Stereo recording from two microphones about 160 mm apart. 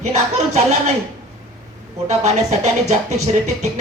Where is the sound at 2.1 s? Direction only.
45° right (ahead or behind).